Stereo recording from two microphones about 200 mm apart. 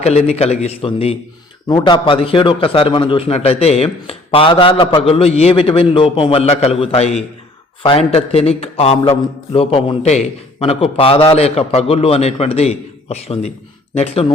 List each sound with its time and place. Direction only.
0.0 s a man's voice: 35° left (ahead or behind)